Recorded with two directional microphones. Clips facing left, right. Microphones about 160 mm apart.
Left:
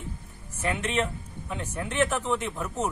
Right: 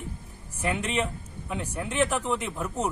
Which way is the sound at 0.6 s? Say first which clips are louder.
Even; 5° right (ahead or behind).